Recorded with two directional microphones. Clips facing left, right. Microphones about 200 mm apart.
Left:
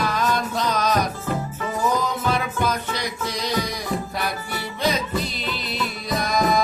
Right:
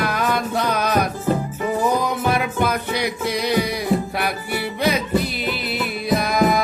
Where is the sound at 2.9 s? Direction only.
60° right (ahead or behind).